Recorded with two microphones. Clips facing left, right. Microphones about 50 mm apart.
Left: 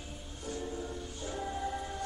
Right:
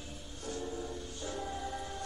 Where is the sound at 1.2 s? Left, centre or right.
Centre.